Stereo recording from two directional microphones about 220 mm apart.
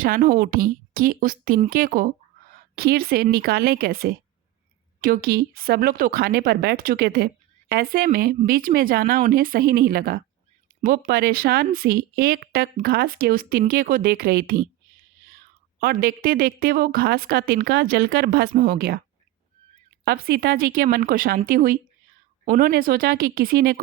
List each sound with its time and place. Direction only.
0.0 s speech: 40° right (ahead or behind)
15.8 s speech: 40° right (ahead or behind)
20.1 s speech: 45° right (ahead or behind)